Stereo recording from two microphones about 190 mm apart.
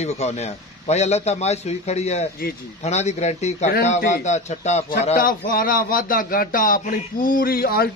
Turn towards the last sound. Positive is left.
turn(degrees=50)  # may be behind; listen again after turning